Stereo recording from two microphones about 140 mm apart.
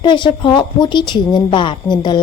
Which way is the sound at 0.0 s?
35° left (ahead or behind).